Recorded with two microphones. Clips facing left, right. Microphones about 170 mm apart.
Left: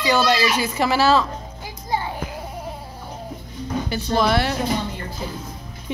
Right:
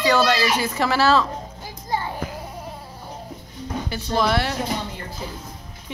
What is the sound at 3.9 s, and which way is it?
Speech, 10° left (ahead or behind).